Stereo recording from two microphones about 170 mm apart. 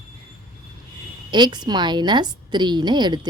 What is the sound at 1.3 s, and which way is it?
A woman's voice, 25° right (ahead or behind).